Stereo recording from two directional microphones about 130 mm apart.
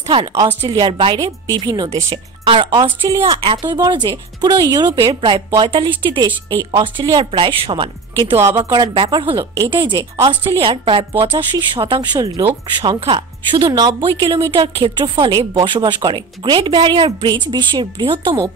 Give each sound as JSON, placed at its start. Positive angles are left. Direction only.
{"t": 0.7, "sound": "speech", "side_deg": -35}
{"t": 8.4, "sound": "speech", "side_deg": -20}
{"t": 8.9, "sound": "speech", "side_deg": -40}